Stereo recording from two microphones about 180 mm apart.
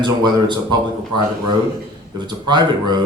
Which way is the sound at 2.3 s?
25° right (ahead or behind).